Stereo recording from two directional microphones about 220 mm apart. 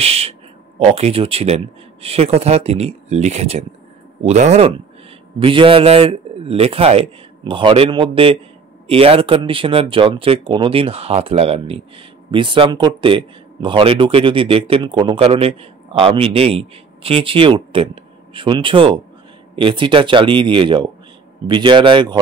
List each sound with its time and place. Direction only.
0.0 s speech: 25° right (ahead or behind)